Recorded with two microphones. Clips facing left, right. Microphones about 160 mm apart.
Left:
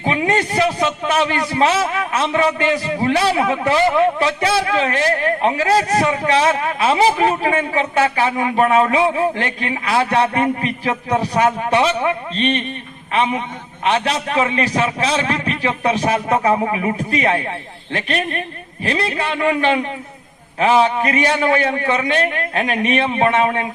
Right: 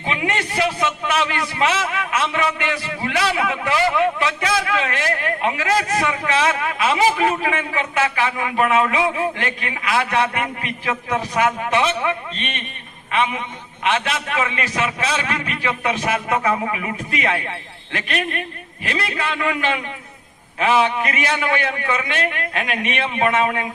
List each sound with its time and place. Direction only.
0.0 s a man's voice: 35° left (ahead or behind)